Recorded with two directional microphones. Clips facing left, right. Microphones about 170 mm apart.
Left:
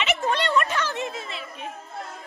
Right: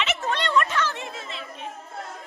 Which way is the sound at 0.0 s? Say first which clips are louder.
Left 2 dB; 10° left (ahead or behind).